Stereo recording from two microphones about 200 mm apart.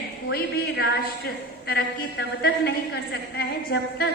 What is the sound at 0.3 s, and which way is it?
A woman's voice, 50° left (ahead or behind).